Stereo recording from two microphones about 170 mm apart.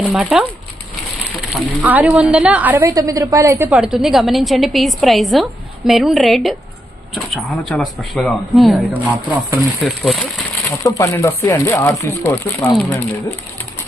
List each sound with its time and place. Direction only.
0.0 s a woman's voice: 5° right (ahead or behind)
3.7 s a woman's voice: 5° right (ahead or behind)
8.9 s speech: 10° right (ahead or behind)
9.8 s a woman's voice: centre (ahead or behind)
10.8 s speech: 20° left (ahead or behind)